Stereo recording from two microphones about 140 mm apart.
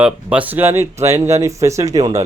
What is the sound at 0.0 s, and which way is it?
Speech, 10° right (ahead or behind).